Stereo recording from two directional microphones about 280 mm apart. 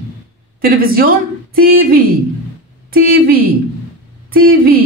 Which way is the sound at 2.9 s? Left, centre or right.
Right.